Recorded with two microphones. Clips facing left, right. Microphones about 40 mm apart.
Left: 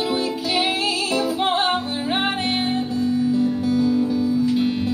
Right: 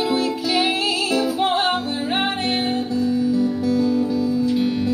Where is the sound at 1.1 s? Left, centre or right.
Centre.